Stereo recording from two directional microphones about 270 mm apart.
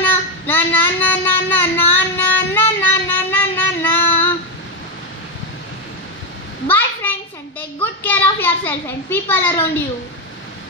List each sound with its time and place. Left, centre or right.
0.0 s child singing: centre
6.7 s a sound: centre
7.8 s a child's voice: centre